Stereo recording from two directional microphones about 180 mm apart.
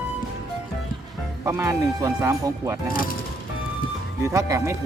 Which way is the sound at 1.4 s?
15° right (ahead or behind).